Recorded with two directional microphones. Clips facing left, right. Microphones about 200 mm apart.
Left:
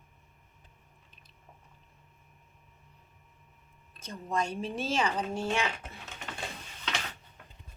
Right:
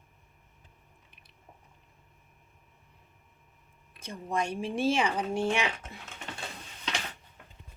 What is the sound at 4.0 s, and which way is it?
Speech, 15° right (ahead or behind).